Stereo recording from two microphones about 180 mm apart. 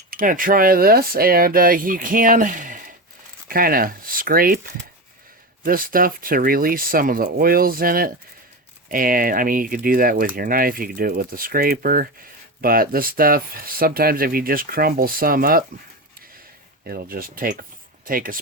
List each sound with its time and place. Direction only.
0.1 s speech: 50° right (ahead or behind)
5.6 s speech: 50° right (ahead or behind)
16.8 s speech: 60° right (ahead or behind)